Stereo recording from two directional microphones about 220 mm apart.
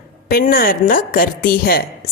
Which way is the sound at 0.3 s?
40° left (ahead or behind).